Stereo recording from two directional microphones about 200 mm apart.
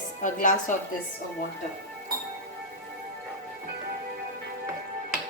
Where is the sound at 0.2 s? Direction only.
40° left (ahead or behind).